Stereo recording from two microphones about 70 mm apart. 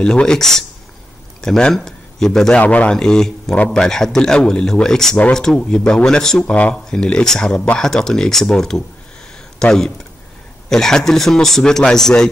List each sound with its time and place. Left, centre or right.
0.0 s a man's voice: centre
2.6 s a man's voice: left
3.0 s a man's voice: centre